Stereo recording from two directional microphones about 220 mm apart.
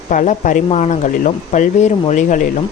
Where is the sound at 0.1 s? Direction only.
35° left (ahead or behind).